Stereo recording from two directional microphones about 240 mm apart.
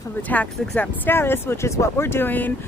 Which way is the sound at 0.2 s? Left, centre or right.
Centre.